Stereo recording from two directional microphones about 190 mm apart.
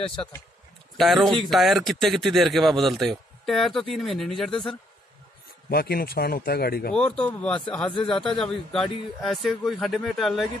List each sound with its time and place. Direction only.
0.9 s speech: centre (ahead or behind)
5.7 s speech: 55° left (ahead or behind)
7.2 s speech: 5° left (ahead or behind)
7.9 s speech: 25° left (ahead or behind)
8.4 s speech: centre (ahead or behind)